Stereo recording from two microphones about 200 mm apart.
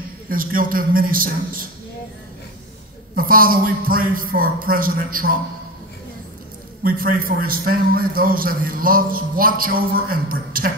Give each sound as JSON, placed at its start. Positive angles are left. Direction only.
{"t": 0.3, "sound": "a man's voice", "side_deg": -45}
{"t": 3.2, "sound": "a man's voice", "side_deg": -45}
{"t": 6.8, "sound": "a man's voice", "side_deg": -45}